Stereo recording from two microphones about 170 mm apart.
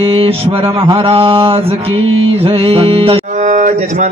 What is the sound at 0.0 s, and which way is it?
Mantra, 35° right (ahead or behind).